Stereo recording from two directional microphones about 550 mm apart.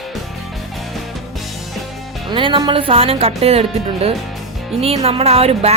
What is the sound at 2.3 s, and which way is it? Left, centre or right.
Speech, centre.